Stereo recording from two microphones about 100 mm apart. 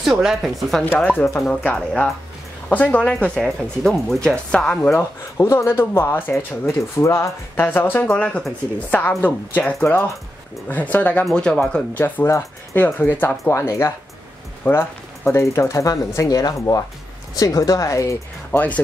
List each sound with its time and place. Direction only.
0.0 s speech: 5° right (ahead or behind)
0.9 s speech: 15° left (ahead or behind)
2.7 s speech: 15° left (ahead or behind)
4.9 s speech: 25° left (ahead or behind)
11.2 s speech: 5° left (ahead or behind)
11.9 s speech: 20° left (ahead or behind)